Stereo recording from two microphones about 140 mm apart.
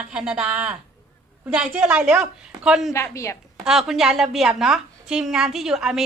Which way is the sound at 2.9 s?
20° left (ahead or behind).